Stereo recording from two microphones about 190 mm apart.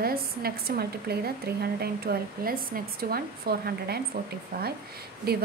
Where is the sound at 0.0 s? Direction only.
55° right (ahead or behind).